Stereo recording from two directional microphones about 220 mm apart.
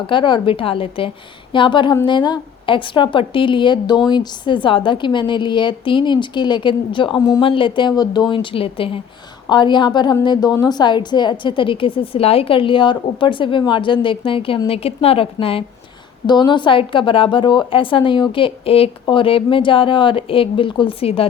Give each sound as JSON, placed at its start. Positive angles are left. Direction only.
{"t": 0.1, "sound": "a woman's voice", "side_deg": 20}